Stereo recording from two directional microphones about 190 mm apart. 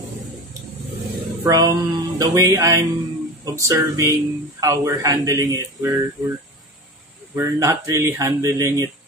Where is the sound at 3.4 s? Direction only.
15° right (ahead or behind).